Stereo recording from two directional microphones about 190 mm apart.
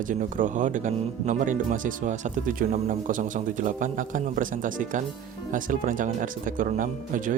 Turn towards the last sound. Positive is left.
turn(degrees=-45)  # may be behind; listen again after turning